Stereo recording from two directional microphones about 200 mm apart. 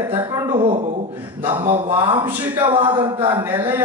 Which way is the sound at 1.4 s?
10° right (ahead or behind).